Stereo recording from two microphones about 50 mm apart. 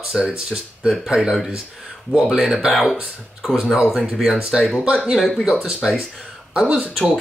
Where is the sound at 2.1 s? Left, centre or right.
Right.